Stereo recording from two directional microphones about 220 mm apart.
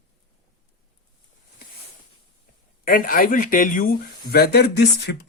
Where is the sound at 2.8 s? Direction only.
40° left (ahead or behind).